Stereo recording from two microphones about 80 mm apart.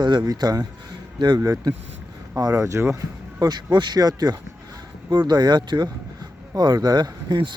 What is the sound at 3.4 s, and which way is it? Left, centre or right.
Speech, right.